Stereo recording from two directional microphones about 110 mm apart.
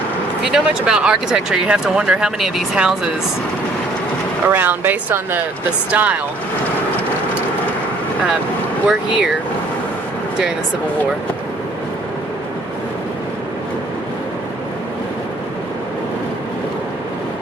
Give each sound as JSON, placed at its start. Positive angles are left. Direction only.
{"t": 0.4, "sound": "speech", "side_deg": -5}
{"t": 4.4, "sound": "speech", "side_deg": -20}
{"t": 8.9, "sound": "speech", "side_deg": -5}